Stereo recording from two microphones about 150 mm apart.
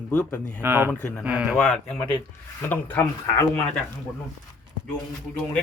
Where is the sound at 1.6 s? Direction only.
5° left (ahead or behind).